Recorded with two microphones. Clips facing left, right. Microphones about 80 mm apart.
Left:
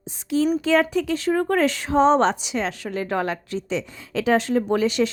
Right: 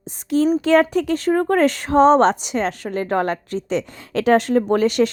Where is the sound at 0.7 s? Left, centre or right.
Right.